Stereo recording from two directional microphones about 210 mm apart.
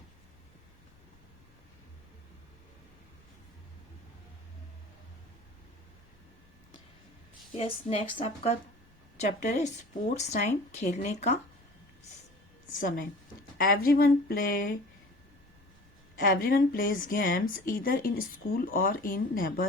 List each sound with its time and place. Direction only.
7.5 s a woman's voice: 30° left (ahead or behind)
13.6 s speech: 45° left (ahead or behind)
16.1 s speech: 45° left (ahead or behind)